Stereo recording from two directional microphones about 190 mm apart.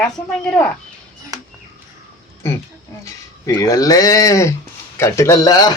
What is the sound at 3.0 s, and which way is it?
A man's voice, 15° left (ahead or behind).